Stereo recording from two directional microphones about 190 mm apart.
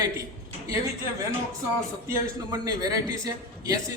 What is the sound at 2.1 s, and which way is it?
A man's voice, 20° right (ahead or behind).